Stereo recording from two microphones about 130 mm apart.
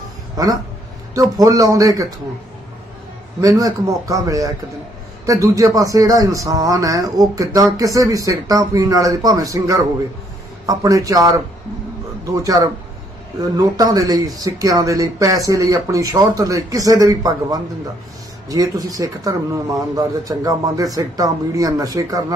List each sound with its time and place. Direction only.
1.1 s a man's voice: 25° right (ahead or behind)
3.3 s a man's voice: 25° right (ahead or behind)